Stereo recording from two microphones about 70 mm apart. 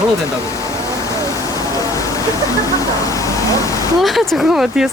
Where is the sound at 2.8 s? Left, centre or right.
Left.